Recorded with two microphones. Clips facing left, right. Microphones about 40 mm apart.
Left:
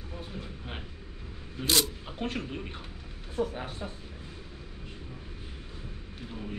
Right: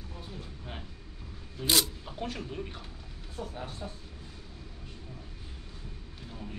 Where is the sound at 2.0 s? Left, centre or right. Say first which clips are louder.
Left 3 dB; left.